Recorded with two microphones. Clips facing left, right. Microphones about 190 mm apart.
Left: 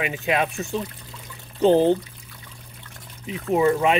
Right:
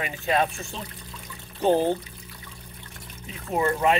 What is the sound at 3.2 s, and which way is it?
Speech, 15° left (ahead or behind).